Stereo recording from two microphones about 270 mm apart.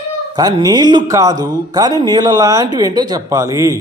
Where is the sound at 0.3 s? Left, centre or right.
Centre.